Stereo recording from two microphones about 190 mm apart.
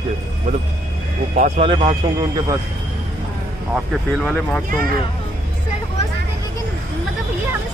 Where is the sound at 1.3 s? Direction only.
40° right (ahead or behind).